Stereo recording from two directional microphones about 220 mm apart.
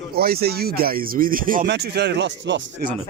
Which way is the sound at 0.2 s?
45° right (ahead or behind).